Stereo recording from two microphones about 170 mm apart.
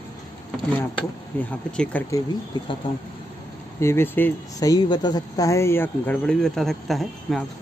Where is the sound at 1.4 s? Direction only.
10° left (ahead or behind).